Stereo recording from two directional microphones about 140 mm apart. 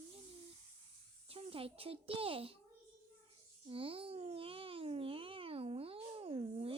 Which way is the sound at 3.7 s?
40° right (ahead or behind).